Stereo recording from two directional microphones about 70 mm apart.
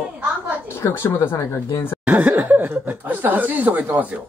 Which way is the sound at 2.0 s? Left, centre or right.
Right.